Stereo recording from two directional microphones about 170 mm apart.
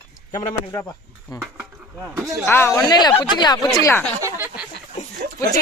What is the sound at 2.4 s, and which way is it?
Speech, 15° left (ahead or behind).